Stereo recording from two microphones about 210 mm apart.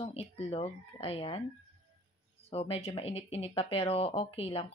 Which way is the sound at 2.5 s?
25° left (ahead or behind).